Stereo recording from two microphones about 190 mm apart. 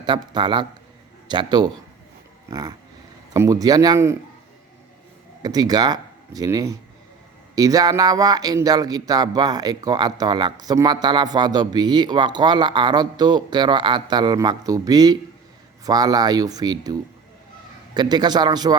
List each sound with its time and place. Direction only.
0.0 s a man's voice: 25° right (ahead or behind)
5.4 s a man's voice: 20° right (ahead or behind)